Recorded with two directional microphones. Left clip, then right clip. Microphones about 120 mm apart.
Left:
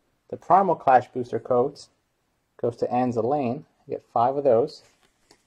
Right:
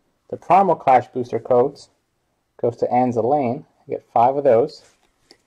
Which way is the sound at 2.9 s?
35° left (ahead or behind).